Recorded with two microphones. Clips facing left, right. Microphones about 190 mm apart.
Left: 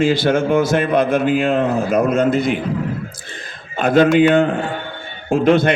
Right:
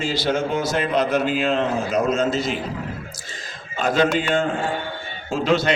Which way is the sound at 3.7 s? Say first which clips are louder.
Left 7 dB; 55° left (ahead or behind).